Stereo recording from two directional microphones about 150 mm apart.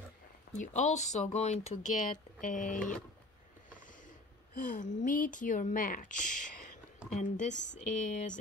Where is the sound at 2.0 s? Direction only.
65° left (ahead or behind).